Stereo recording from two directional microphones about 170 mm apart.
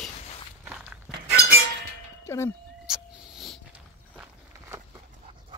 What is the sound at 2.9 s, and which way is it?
Cat, centre (ahead or behind).